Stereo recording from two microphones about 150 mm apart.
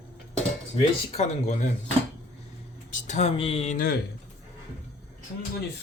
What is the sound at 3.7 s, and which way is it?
Speech, 80° left.